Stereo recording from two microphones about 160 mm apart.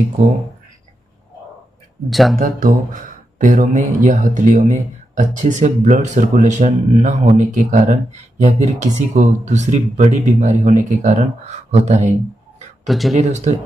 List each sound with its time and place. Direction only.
2.0 s speech: centre (ahead or behind)
2.3 s speech: 60° right (ahead or behind)
12.8 s speech: centre (ahead or behind)
13.1 s speech: 45° right (ahead or behind)